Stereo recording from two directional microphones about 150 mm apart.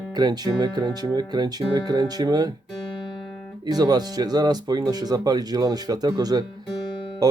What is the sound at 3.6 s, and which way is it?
Speech, 25° right (ahead or behind).